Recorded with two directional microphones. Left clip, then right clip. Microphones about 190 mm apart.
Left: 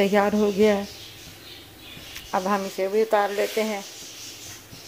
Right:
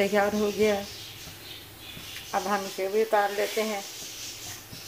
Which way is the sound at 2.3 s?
35° left (ahead or behind).